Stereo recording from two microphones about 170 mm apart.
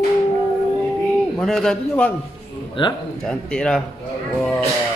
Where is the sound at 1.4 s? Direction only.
5° left (ahead or behind).